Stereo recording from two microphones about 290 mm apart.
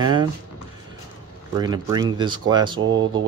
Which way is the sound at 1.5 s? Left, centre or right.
Centre.